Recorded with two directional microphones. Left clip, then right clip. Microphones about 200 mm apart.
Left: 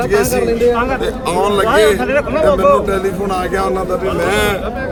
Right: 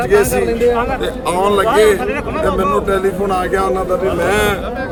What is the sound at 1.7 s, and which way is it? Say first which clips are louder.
Speech: left 1 dB; 30° left (ahead or behind).